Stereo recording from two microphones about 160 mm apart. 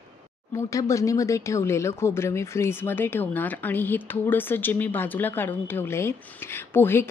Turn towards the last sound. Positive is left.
turn(degrees=15)  # may be behind; listen again after turning